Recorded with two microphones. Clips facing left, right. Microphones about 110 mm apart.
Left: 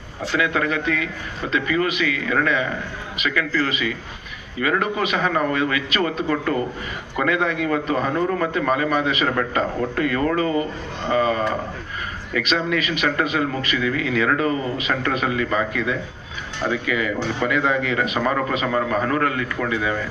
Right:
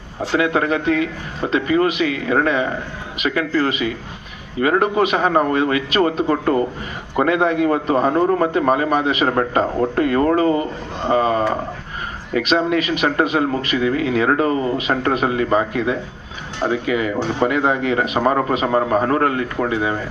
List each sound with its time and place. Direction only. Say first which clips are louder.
0.3 s a man's voice: right 4 dB; 35° right (ahead or behind)